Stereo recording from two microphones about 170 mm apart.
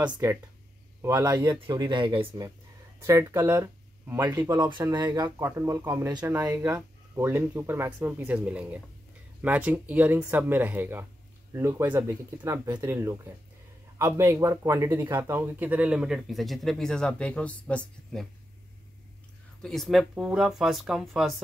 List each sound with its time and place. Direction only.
0.0 s speech: 15° right (ahead or behind); by 18.2 s 5° left (ahead or behind)
19.6 s speech: centre (ahead or behind)